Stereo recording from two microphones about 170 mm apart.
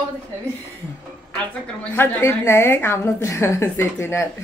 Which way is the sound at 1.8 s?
15° left (ahead or behind).